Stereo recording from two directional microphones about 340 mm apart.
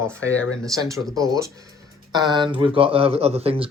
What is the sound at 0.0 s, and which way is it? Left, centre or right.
Speech, centre.